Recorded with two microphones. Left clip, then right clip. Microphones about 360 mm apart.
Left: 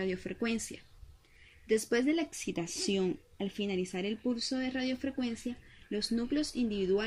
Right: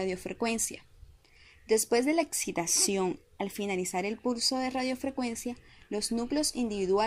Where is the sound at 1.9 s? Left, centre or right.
Centre.